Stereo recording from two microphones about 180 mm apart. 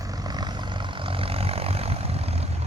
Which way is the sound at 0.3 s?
20° right (ahead or behind).